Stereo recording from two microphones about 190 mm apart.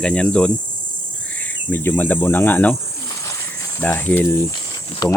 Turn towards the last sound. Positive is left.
turn(degrees=20)  # may be behind; listen again after turning